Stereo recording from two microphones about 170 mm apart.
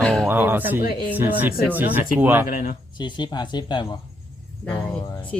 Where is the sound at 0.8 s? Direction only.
60° left (ahead or behind).